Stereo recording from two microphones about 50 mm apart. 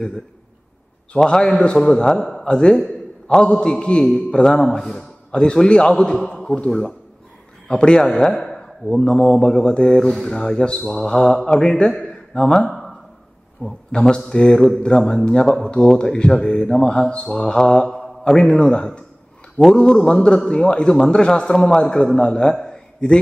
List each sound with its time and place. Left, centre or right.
1.1 s a man's voice: centre
2.0 s a man's voice: centre
8.6 s a sound: centre
9.0 s mantra: centre
9.4 s a man's voice: centre
13.6 s mantra: left
13.9 s a man's voice: centre
17.8 s mantra: centre
18.2 s a man's voice: centre